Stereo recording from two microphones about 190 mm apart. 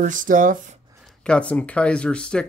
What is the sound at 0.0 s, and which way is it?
Speech, 45° right (ahead or behind).